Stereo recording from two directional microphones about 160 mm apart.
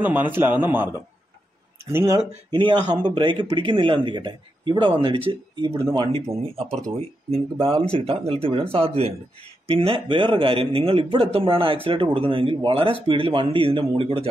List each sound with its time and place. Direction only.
0.0 s a man's voice: 10° right (ahead or behind)
2.9 s speech: 25° right (ahead or behind)